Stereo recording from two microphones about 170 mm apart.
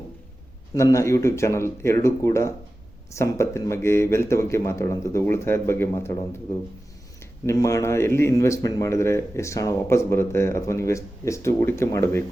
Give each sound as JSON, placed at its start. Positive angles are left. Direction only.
{"t": 0.7, "sound": "speech", "side_deg": 20}